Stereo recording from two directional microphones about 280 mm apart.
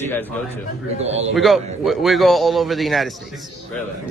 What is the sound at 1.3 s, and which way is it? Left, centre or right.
Speech, centre.